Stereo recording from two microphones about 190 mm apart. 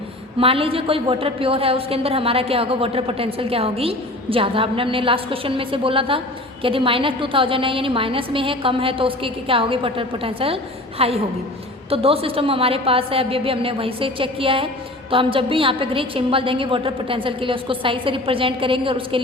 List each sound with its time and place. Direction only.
0.3 s a woman's voice: 30° right (ahead or behind)